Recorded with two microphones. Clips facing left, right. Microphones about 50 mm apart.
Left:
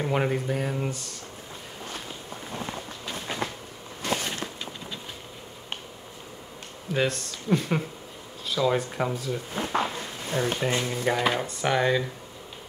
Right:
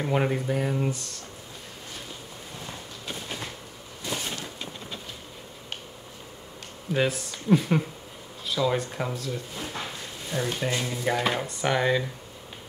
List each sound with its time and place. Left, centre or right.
0.0 s speech: centre
4.0 s a sound: left
6.9 s speech: centre
9.5 s speech: left
9.8 s a sound: left
10.7 s frying: left
11.1 s speech: centre